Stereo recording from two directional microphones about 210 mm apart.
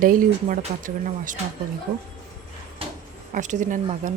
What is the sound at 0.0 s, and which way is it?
Speech, 40° right (ahead or behind).